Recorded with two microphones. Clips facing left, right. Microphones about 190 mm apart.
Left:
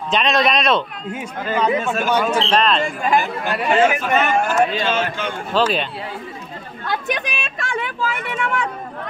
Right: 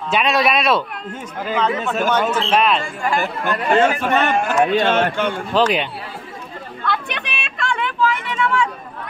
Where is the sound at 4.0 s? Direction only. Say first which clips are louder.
Even; 65° right (ahead or behind).